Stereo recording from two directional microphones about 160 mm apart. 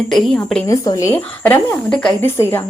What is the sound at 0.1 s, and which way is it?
Speech, 5° left (ahead or behind).